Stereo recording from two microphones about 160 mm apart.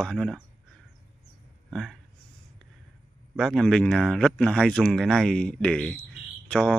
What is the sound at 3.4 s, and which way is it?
Speech, 5° left (ahead or behind).